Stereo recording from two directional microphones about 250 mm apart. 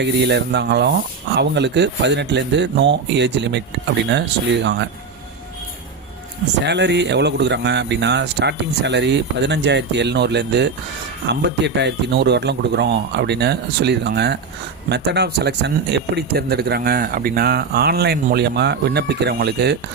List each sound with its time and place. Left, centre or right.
0.0 s speech: right
4.6 s speech: right
6.7 s speech: right